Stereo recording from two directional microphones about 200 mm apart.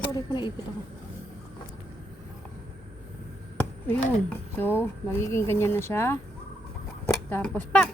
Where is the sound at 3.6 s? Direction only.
10° left (ahead or behind).